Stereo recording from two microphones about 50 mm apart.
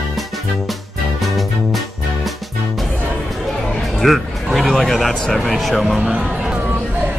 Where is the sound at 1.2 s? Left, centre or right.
Centre.